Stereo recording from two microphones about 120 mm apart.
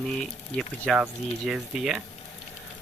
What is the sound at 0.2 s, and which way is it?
Speech, 5° left (ahead or behind).